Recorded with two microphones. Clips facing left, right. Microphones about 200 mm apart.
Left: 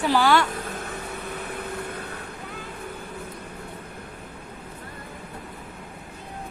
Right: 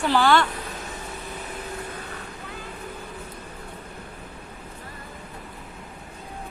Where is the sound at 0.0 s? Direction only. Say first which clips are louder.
Even; 10° left (ahead or behind).